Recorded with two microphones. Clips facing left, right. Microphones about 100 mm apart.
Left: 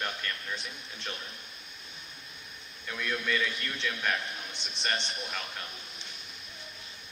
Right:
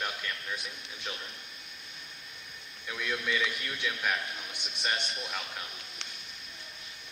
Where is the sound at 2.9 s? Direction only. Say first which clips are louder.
Left 1 dB; 5° right (ahead or behind).